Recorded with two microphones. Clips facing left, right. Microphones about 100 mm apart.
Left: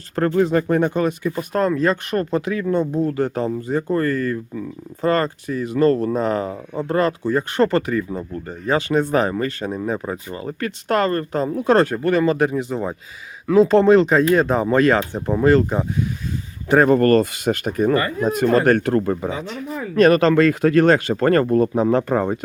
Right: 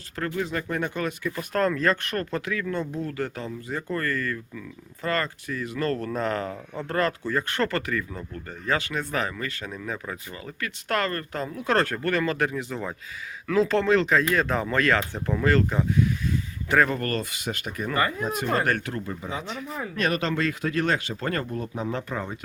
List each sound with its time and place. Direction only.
0.3 s speech: 35° left (ahead or behind); by 15.9 s 20° left (ahead or behind)
16.8 s speech: 40° left (ahead or behind)